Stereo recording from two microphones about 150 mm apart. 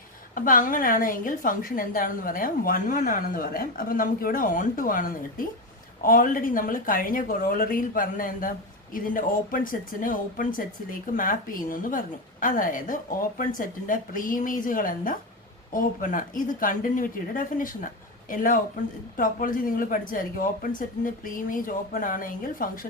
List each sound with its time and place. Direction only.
0.3 s a woman's voice: 65° left (ahead or behind)